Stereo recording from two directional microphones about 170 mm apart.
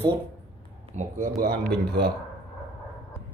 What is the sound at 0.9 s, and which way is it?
Speech, 45° right (ahead or behind).